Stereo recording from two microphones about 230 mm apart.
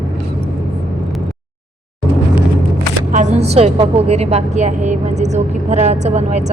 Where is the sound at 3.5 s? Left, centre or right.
Right.